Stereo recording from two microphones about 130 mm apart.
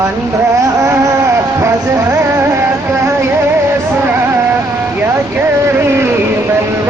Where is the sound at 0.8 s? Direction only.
20° right (ahead or behind).